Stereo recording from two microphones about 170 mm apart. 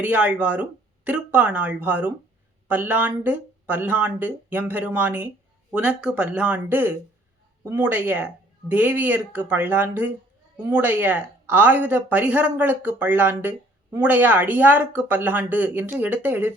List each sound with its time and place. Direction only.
0.0 s speech: 10° right (ahead or behind)